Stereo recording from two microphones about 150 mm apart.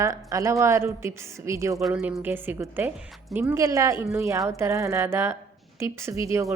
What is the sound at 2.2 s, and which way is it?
A woman's voice, 15° right (ahead or behind).